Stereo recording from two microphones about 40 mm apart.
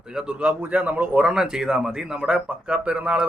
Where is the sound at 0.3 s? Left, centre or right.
Right.